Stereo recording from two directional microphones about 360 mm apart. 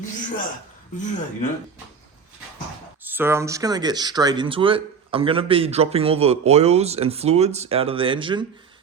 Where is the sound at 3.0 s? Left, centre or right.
Centre.